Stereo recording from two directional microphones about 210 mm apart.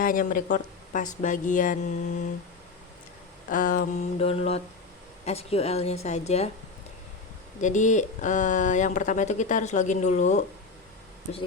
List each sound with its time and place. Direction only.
0.0 s speech: 40° left (ahead or behind)
3.5 s a woman's voice: 40° left (ahead or behind)
7.6 s speech: 35° left (ahead or behind)